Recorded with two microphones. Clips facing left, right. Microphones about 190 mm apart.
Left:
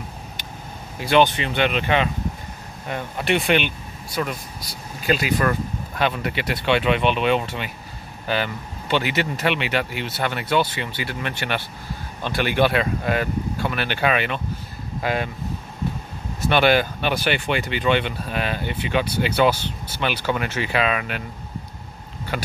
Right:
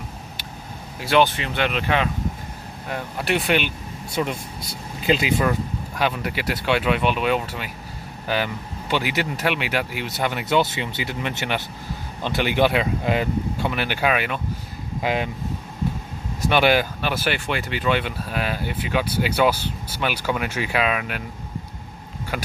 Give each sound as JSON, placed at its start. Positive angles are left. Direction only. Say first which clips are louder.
{"t": 1.0, "sound": "speech", "louder": "left 1 dB", "side_deg": 0}
{"t": 4.1, "sound": "speech", "louder": "right 1 dB", "side_deg": -25}
{"t": 5.5, "sound": "speech", "louder": "even", "side_deg": -10}
{"t": 16.3, "sound": "speech", "louder": "left 1 dB", "side_deg": -10}
{"t": 22.3, "sound": "speech", "louder": "left 1 dB", "side_deg": -5}